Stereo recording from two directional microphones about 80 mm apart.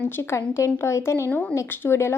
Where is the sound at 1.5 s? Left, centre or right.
Left.